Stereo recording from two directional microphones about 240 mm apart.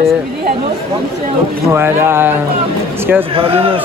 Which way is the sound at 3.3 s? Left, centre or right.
Right.